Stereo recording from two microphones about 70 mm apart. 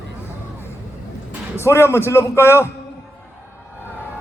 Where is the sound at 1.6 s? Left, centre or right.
Left.